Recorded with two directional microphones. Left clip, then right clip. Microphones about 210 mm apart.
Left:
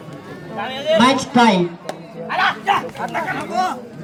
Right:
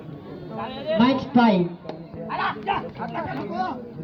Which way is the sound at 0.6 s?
30° left (ahead or behind).